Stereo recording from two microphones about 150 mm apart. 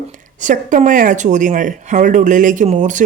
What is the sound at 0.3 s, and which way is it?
A woman's voice, 55° right (ahead or behind).